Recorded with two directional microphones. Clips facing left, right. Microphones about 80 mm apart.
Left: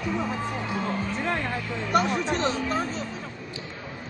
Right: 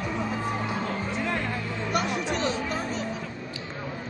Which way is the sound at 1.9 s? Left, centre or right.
Left.